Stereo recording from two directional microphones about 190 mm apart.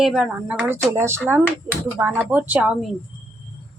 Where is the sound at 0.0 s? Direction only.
5° right (ahead or behind).